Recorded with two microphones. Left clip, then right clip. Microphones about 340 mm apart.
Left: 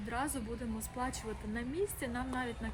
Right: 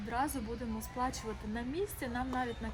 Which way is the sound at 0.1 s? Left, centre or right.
Centre.